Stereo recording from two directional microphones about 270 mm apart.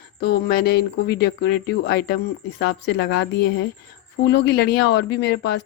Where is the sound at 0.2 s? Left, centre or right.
Left.